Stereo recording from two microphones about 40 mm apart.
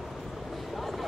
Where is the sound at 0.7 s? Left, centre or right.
Centre.